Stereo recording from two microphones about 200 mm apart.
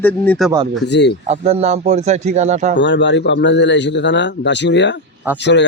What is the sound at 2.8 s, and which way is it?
A man's voice, 65° left (ahead or behind).